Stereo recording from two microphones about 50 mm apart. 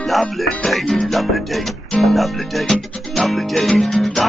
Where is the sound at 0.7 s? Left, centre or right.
Centre.